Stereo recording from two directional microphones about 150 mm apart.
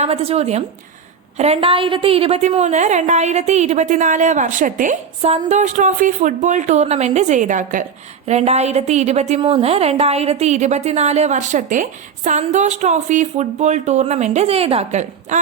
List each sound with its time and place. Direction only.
0.0 s a woman's voice: 40° right (ahead or behind); by 7.9 s 60° right (ahead or behind)
8.3 s a woman's voice: 45° right (ahead or behind)